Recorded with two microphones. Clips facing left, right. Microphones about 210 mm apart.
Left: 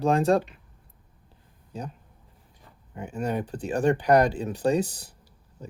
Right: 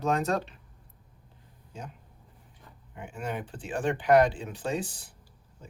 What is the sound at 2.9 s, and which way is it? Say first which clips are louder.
Speech: left 6 dB; 40° left (ahead or behind).